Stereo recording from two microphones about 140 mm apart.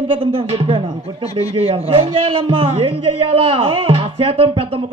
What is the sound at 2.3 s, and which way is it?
Speech, 35° right (ahead or behind).